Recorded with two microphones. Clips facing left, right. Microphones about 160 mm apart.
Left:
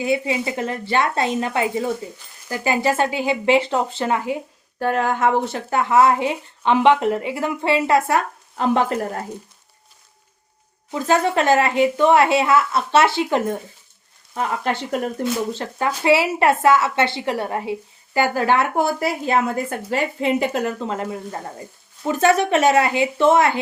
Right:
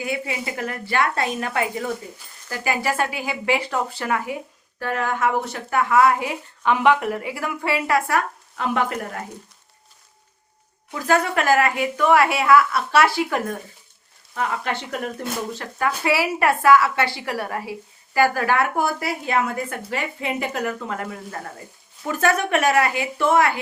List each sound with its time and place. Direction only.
0.0 s speech: 25° left (ahead or behind)
10.9 s speech: 25° left (ahead or behind)